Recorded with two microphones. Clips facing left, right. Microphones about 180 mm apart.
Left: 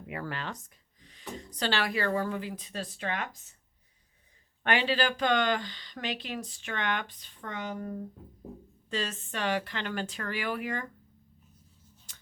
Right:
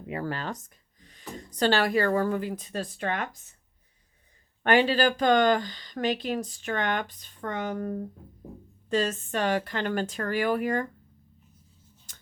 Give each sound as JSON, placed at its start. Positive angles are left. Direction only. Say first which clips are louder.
{"t": 0.0, "sound": "speech", "louder": "right 5 dB", "side_deg": -30}
{"t": 4.6, "sound": "speech", "louder": "right 6 dB", "side_deg": -45}
{"t": 12.1, "sound": "a sound", "louder": "right 2 dB", "side_deg": -45}